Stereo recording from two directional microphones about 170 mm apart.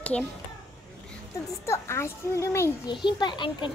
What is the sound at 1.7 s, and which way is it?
A child's voice, 15° left (ahead or behind).